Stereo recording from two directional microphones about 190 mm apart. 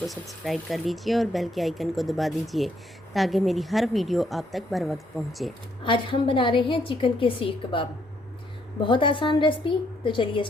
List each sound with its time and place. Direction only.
0.1 s speech: centre (ahead or behind)
5.8 s a woman's voice: 25° left (ahead or behind)